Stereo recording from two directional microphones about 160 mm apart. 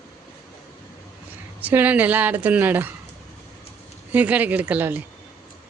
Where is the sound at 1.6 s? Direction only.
10° right (ahead or behind).